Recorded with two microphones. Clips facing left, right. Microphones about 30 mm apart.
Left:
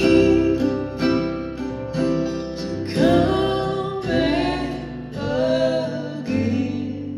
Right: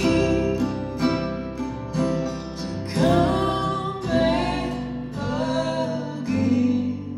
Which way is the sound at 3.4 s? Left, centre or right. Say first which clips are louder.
Left 2 dB; left.